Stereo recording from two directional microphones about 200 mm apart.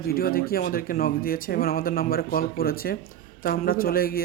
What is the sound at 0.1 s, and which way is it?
Speech, 45° left (ahead or behind).